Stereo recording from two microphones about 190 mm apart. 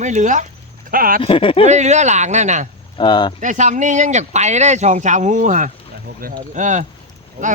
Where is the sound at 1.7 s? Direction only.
35° right (ahead or behind).